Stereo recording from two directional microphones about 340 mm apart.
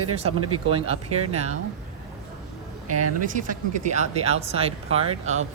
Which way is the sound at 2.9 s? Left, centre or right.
Right.